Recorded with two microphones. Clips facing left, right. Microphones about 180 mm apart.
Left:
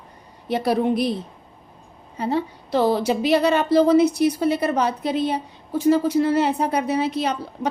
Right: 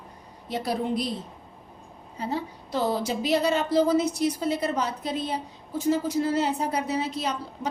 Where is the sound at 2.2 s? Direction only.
70° left (ahead or behind).